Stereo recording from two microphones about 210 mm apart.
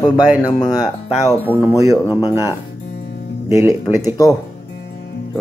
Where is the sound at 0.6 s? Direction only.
20° left (ahead or behind).